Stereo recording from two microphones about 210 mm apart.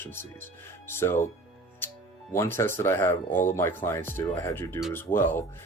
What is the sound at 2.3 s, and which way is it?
Speech, 10° left (ahead or behind).